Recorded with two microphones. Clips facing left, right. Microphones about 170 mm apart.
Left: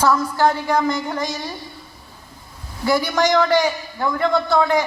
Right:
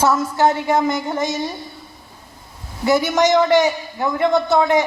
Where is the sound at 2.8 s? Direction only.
25° right (ahead or behind).